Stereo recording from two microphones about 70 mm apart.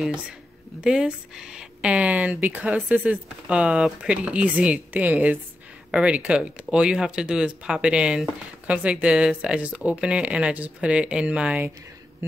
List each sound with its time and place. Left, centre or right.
0.7 s speech: centre